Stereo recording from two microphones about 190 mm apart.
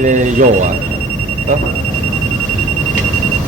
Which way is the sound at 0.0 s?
40° right (ahead or behind).